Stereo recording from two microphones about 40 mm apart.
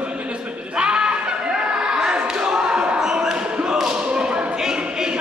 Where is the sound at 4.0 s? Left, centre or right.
Right.